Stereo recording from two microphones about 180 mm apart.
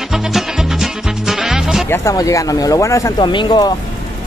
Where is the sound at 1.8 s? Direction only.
15° left (ahead or behind).